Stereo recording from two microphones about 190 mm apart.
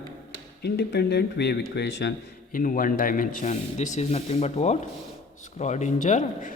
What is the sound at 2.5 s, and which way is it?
Speech, 45° left (ahead or behind).